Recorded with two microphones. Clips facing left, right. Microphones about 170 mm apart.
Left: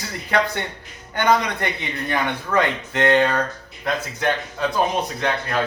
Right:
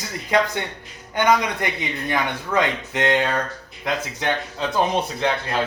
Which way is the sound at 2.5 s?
15° right (ahead or behind).